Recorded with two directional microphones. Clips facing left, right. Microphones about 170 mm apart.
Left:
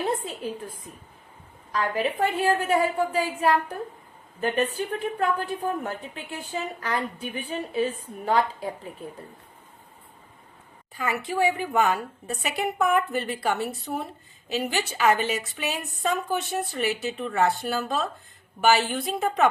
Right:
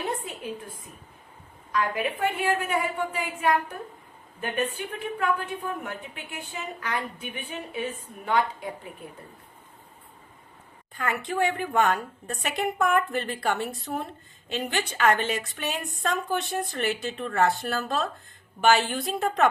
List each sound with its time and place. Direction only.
1.7 s a woman's voice: 35° left (ahead or behind)
10.9 s a woman's voice: 5° left (ahead or behind)